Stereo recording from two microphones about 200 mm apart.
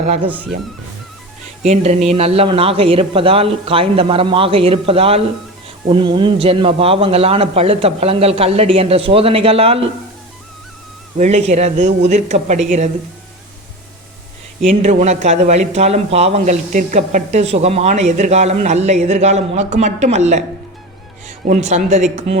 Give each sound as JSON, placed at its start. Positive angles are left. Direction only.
{"t": 1.6, "sound": "a man's voice", "side_deg": -35}
{"t": 11.2, "sound": "speech", "side_deg": -35}
{"t": 14.7, "sound": "speech", "side_deg": -35}
{"t": 21.4, "sound": "speech", "side_deg": -40}